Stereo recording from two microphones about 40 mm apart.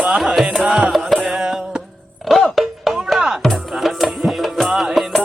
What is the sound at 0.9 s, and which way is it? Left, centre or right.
Music, centre.